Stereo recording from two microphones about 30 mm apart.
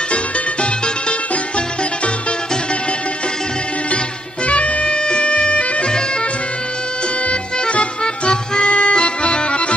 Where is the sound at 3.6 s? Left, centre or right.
Left.